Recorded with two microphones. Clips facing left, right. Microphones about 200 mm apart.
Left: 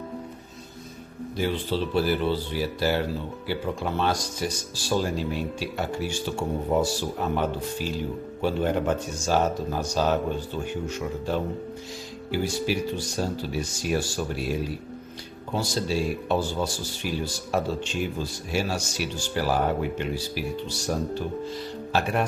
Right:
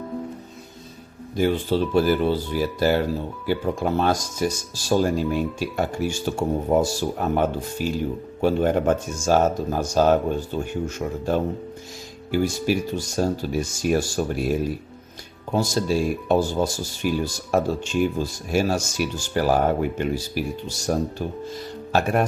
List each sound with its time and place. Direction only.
1.4 s speech: 45° right (ahead or behind)
15.5 s speech: 45° right (ahead or behind)